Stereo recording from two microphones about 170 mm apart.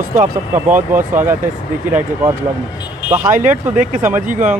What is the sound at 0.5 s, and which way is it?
Speech, 10° right (ahead or behind).